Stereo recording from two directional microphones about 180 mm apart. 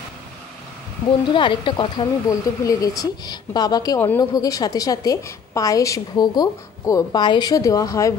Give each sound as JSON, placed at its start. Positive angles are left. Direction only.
{"t": 1.3, "sound": "a woman's voice", "side_deg": 25}